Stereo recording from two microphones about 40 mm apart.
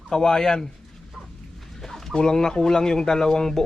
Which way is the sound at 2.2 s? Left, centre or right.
Centre.